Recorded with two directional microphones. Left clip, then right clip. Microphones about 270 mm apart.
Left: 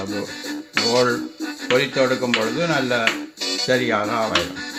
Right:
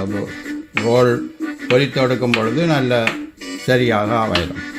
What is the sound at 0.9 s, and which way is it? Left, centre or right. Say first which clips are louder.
Speech: right 5 dB; right.